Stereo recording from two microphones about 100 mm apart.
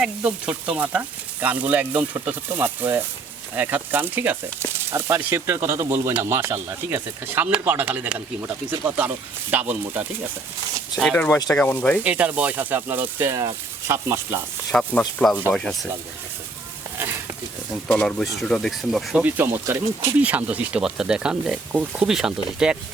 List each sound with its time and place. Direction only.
0.0 s speech: 10° right (ahead or behind)
11.0 s speech: 10° left (ahead or behind)
12.0 s speech: 15° right (ahead or behind)
14.7 s speech: 10° left (ahead or behind)
17.8 s speech: 10° left (ahead or behind)
19.2 s speech: 20° right (ahead or behind)
20.2 s speech: 15° right (ahead or behind)